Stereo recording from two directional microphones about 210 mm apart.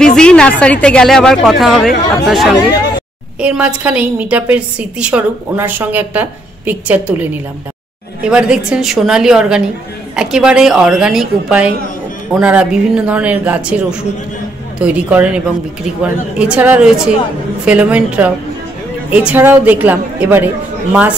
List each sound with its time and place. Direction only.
0.0 s a woman's voice: 5° left (ahead or behind)